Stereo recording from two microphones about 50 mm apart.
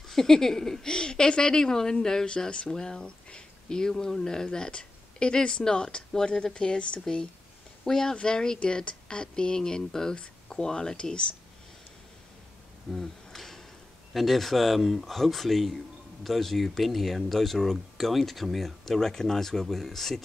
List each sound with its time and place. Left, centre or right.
0.1 s speech: centre
12.9 s a sound: centre
14.1 s speech: centre